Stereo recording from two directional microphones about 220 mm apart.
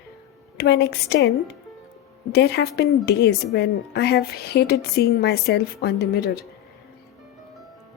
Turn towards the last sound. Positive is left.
turn(degrees=45)  # may be behind; listen again after turning